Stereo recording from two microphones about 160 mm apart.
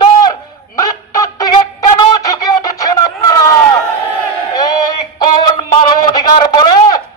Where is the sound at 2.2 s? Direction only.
20° left (ahead or behind).